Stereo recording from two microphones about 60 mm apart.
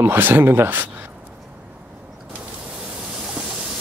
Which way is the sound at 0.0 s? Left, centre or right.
Right.